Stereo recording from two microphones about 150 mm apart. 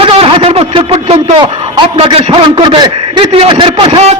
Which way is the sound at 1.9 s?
35° right (ahead or behind).